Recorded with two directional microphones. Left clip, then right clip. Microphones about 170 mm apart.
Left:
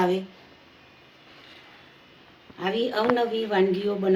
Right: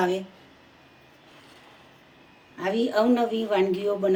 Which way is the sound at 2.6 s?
75° right (ahead or behind).